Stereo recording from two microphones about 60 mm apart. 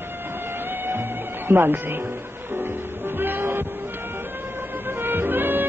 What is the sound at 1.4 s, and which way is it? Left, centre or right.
Speech, right.